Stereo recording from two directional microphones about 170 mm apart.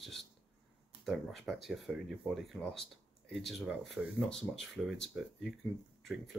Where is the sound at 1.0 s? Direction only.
Centre (ahead or behind).